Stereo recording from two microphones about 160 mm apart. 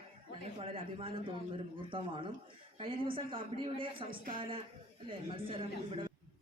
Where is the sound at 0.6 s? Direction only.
35° right (ahead or behind).